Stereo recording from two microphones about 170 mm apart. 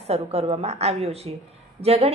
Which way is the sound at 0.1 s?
35° right (ahead or behind).